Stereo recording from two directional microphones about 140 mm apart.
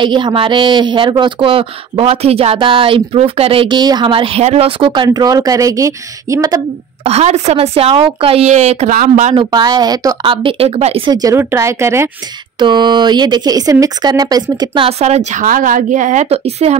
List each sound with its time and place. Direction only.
0.0 s speech: 35° right (ahead or behind)
7.1 s speech: 50° right (ahead or behind)
8.9 s speech: 65° right (ahead or behind)
9.3 s speech: 30° right (ahead or behind)
11.1 s speech: 25° right (ahead or behind)
12.5 s speech: 30° right (ahead or behind); by 15.4 s 50° right (ahead or behind)
15.4 s speech: 80° right; by 16.7 s 50° right (ahead or behind)